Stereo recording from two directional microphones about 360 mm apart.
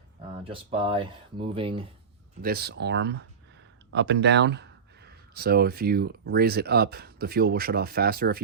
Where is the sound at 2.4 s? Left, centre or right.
Right.